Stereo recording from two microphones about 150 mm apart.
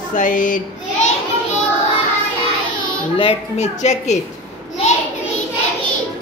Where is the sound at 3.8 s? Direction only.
50° left (ahead or behind).